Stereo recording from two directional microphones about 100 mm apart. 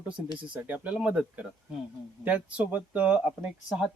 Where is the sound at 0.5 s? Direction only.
15° right (ahead or behind).